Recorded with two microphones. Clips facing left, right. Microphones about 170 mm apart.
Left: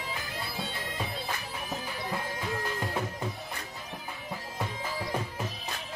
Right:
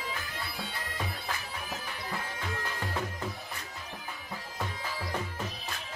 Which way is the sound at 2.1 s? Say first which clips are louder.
Left 3 dB; 20° left (ahead or behind).